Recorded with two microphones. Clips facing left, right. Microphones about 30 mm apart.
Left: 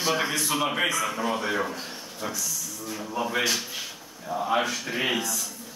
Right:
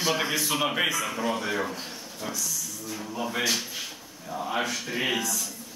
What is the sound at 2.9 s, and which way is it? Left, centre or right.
Speech, centre.